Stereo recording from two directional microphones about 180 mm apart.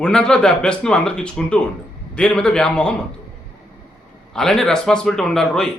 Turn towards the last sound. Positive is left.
turn(degrees=5)  # may be behind; listen again after turning